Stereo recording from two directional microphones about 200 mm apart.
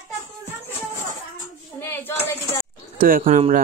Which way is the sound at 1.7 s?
10° left (ahead or behind).